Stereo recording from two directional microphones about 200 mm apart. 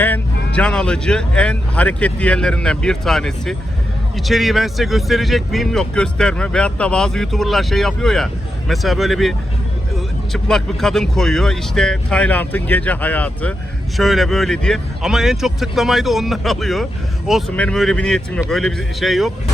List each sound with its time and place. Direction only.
0.0 s speech: 10° left (ahead or behind)
10.3 s speech: centre (ahead or behind)